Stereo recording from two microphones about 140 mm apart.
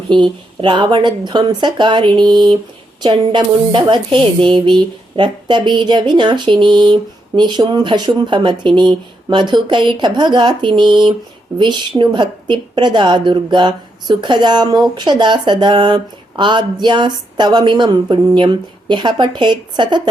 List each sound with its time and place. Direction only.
0.1 s a woman's voice: 35° right (ahead or behind)